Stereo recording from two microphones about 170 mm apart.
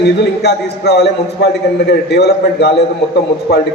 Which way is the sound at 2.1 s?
80° left.